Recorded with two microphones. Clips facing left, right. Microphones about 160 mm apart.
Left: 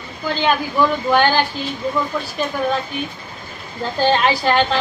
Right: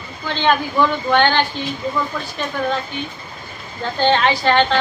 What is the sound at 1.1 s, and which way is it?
Speech, 5° left (ahead or behind).